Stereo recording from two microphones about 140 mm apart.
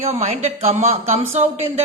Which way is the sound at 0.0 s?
50° right (ahead or behind).